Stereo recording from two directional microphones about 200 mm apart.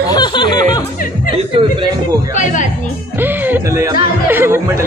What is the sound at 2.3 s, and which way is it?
Speech, 40° left (ahead or behind).